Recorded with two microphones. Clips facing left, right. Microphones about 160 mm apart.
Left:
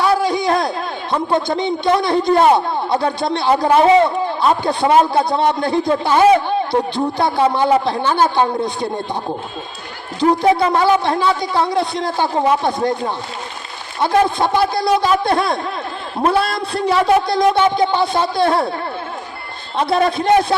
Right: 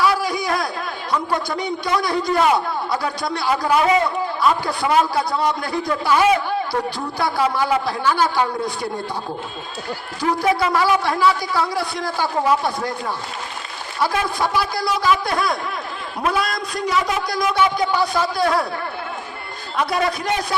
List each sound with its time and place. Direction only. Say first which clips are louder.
0.0 s a sound: left 4 dB; 25° left (ahead or behind)
1.1 s a man's voice: left 5 dB; 25° left (ahead or behind)
10.2 s a man's voice: left 6 dB; 25° left (ahead or behind)
14.3 s a man's voice: left 5 dB; 25° left (ahead or behind)
17.0 s speech: left 13 dB; 60° left (ahead or behind)
17.5 s a man's voice: left 4 dB; 25° left (ahead or behind)
19.7 s a man's voice: left 5 dB; 25° left (ahead or behind)